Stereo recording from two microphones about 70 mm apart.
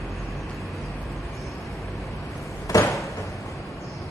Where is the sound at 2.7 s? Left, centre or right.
Left.